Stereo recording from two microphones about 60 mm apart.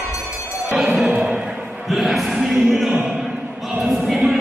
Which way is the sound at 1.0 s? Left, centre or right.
Centre.